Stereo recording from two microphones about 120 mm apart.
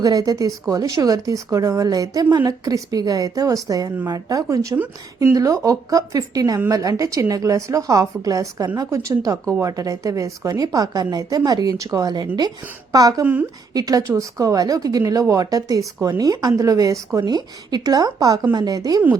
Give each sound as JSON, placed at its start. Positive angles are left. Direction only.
{"t": 0.0, "sound": "a woman's voice", "side_deg": -30}